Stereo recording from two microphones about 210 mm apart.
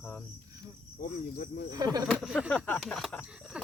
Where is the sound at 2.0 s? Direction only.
Centre (ahead or behind).